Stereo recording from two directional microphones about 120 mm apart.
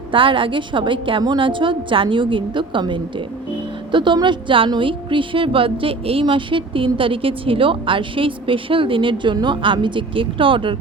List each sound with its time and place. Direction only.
0.1 s a woman's voice: 45° right (ahead or behind)